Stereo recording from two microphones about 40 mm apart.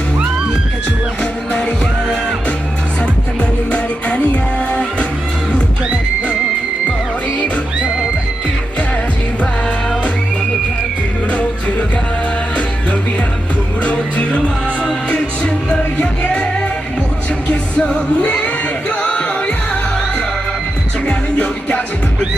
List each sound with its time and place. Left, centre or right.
1.2 s music: left
4.7 s music: left
7.3 s music: left
11.3 s music: left
13.8 s music: left
17.5 s music: left